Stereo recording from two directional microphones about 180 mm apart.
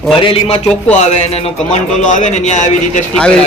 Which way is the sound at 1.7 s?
45° left (ahead or behind).